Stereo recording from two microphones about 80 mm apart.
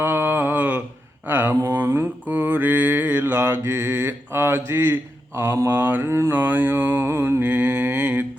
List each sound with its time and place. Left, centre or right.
0.0 s mantra: right
1.3 s a sound: right
1.7 s mantra: right